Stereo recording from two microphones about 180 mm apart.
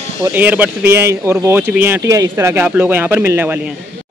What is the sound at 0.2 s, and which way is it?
Speech, 10° right (ahead or behind).